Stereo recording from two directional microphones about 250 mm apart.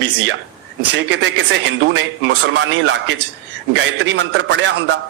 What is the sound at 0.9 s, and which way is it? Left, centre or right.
A man's voice, right.